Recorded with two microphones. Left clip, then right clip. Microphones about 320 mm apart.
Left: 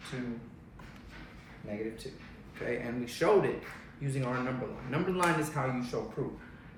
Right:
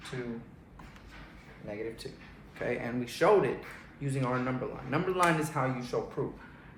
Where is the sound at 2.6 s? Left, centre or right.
Centre.